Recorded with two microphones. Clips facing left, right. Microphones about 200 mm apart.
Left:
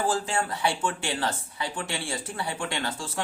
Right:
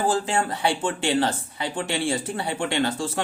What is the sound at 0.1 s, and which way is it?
Speech, 25° right (ahead or behind).